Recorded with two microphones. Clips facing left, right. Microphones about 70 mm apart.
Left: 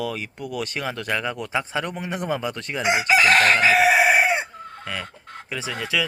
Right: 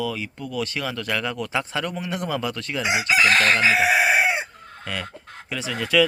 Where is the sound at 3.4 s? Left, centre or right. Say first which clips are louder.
Left 1 dB; left.